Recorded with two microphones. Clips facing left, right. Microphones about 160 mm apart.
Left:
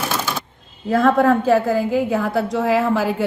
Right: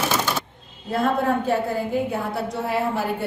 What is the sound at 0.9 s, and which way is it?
A woman's voice, 90° left.